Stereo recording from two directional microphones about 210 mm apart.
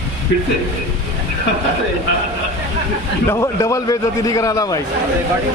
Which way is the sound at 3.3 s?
15° left (ahead or behind).